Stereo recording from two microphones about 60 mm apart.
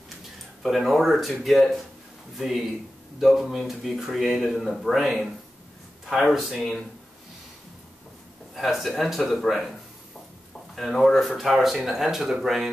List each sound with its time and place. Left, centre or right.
0.6 s speech: centre
8.5 s speech: centre